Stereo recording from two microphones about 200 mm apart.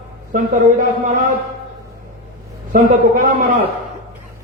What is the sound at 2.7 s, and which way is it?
A man's voice, 45° right (ahead or behind).